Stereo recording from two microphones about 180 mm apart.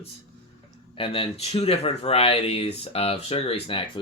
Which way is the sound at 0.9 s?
30° left (ahead or behind).